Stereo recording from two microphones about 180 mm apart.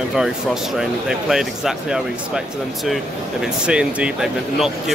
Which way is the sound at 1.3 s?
Centre (ahead or behind).